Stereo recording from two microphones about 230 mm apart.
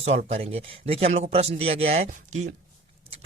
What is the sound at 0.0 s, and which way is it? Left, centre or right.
Speech, right.